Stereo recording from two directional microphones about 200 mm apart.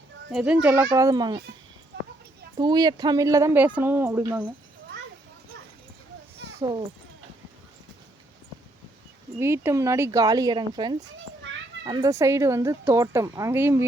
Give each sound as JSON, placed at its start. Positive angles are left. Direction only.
{"t": 0.3, "sound": "speech", "side_deg": -5}
{"t": 2.6, "sound": "speech", "side_deg": -20}
{"t": 6.6, "sound": "speech", "side_deg": -25}
{"t": 9.4, "sound": "speech", "side_deg": -15}